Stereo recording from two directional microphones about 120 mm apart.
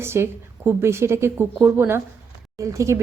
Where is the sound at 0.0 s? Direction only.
20° right (ahead or behind).